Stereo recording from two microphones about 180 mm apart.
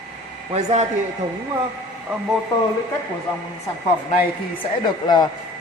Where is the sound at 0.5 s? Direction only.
35° right (ahead or behind).